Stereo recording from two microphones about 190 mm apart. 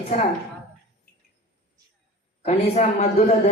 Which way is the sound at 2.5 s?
35° left (ahead or behind).